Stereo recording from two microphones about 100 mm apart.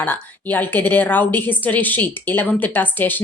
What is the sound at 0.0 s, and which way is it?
Speech, 15° left (ahead or behind).